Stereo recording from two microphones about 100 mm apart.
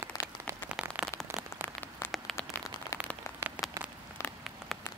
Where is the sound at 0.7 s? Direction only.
10° right (ahead or behind).